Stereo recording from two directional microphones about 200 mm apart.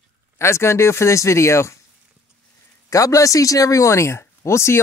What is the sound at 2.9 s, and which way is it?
Speech, 15° left (ahead or behind).